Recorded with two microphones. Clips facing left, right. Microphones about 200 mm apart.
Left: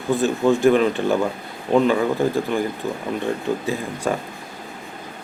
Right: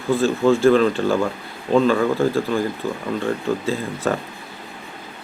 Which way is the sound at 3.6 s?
15° left (ahead or behind).